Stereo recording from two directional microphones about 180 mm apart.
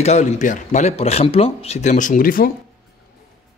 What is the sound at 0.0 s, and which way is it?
Speech, 40° left (ahead or behind).